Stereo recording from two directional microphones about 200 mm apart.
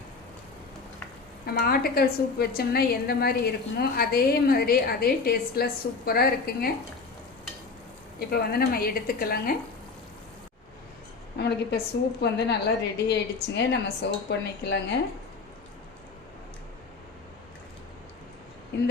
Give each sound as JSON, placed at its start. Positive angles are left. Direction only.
{"t": 1.5, "sound": "a woman's voice", "side_deg": 50}
{"t": 8.3, "sound": "a woman's voice", "side_deg": 50}
{"t": 11.3, "sound": "a woman's voice", "side_deg": 55}
{"t": 18.7, "sound": "speech", "side_deg": 55}